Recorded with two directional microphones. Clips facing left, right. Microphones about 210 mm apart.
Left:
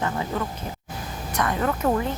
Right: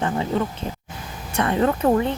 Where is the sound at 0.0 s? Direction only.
25° right (ahead or behind).